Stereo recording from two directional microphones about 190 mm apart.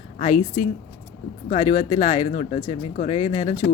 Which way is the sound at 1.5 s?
40° left (ahead or behind).